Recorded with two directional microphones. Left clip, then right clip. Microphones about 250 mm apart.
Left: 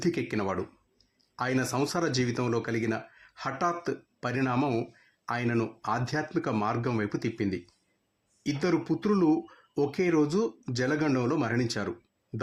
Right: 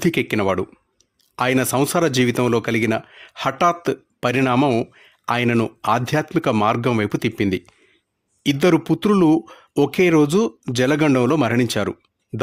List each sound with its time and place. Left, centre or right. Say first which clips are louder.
0.0 s speech: right 10 dB; right
8.6 s speech: right 11 dB; right